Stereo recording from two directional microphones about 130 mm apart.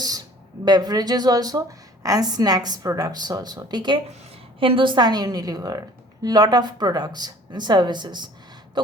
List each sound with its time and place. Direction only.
0.6 s speech: 30° right (ahead or behind)